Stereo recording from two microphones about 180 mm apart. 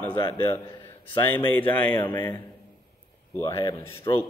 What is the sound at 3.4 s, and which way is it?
Speech, 30° left (ahead or behind).